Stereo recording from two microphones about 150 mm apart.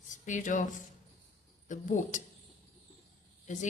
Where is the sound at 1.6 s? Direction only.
55° left (ahead or behind).